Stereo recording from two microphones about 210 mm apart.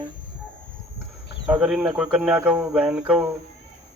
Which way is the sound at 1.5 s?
Centre (ahead or behind).